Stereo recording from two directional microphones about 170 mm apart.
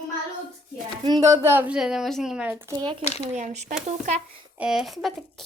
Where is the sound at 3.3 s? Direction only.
45° right (ahead or behind).